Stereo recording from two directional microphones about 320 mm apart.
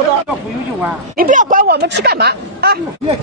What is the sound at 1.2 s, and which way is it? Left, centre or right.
A woman's voice, right.